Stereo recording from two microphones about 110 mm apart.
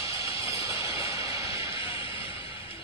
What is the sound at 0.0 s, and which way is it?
Music, 30° right (ahead or behind).